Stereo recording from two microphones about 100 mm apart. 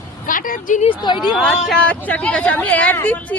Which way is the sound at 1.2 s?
Centre (ahead or behind).